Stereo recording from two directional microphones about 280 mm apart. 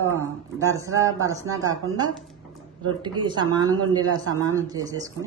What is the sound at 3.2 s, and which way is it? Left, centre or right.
Speech, centre.